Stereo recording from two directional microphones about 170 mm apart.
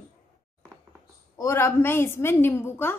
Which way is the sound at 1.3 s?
15° left (ahead or behind).